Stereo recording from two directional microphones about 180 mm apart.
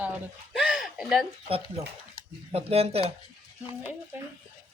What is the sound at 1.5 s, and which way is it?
Speech, 30° right (ahead or behind).